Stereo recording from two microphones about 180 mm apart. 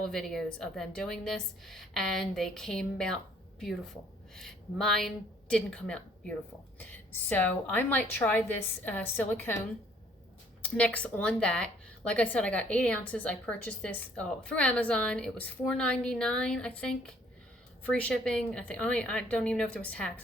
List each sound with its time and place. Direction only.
0.1 s a woman's voice: 5° left (ahead or behind)
10.6 s a woman's voice: 5° left (ahead or behind)